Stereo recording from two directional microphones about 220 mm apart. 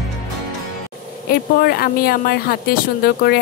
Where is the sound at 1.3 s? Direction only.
45° left (ahead or behind).